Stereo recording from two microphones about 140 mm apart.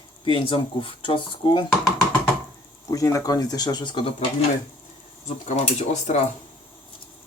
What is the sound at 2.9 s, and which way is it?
Speech, 20° left (ahead or behind).